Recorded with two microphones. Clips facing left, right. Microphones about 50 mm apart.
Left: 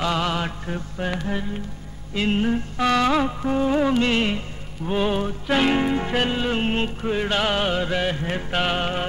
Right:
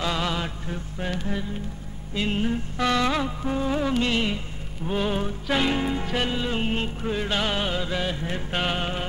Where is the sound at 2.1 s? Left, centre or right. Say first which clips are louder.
Left 4 dB; left.